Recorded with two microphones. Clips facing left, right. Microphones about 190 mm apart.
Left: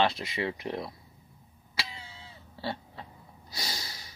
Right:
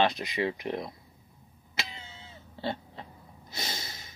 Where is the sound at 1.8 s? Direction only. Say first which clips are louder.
Even; 20° right (ahead or behind).